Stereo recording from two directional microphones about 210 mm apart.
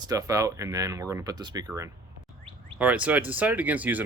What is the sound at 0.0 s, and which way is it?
Speech, 15° right (ahead or behind).